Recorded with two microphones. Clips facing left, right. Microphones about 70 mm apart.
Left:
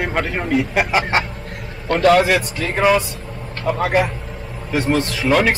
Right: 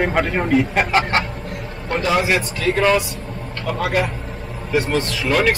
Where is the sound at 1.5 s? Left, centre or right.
Left.